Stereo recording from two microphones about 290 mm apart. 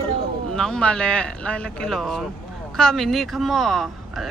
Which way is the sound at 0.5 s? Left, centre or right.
Centre.